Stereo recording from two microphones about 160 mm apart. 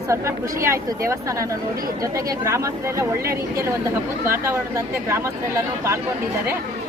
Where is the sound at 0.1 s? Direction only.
20° right (ahead or behind).